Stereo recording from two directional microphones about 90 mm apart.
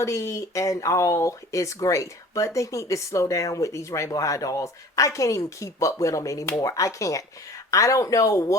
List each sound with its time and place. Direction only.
0.0 s speech: 35° left (ahead or behind)